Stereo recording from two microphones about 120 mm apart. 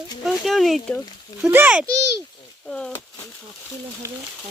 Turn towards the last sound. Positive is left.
turn(degrees=-25)  # may be behind; listen again after turning